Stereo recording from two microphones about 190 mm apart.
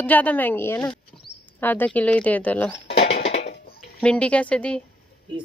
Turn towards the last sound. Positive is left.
turn(degrees=5)  # may be behind; listen again after turning